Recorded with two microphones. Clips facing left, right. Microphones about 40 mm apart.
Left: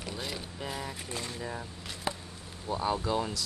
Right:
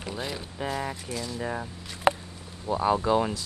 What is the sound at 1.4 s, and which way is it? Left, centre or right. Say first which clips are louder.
Speech: right 6 dB; right.